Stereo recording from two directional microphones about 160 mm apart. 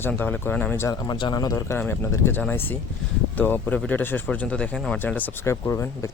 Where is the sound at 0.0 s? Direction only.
10° left (ahead or behind).